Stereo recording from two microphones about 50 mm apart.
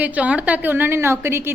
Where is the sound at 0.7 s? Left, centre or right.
Right.